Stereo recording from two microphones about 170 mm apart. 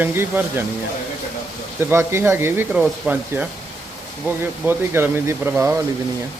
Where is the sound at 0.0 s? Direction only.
10° right (ahead or behind).